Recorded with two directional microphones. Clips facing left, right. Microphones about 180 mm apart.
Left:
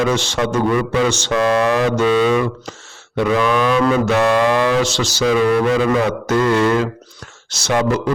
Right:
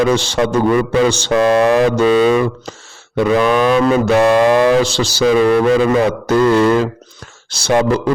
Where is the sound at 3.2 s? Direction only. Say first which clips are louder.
Right 3 dB; 45° right (ahead or behind).